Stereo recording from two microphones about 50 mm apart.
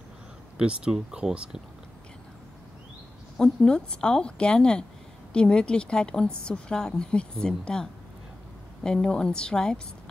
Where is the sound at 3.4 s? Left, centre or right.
Centre.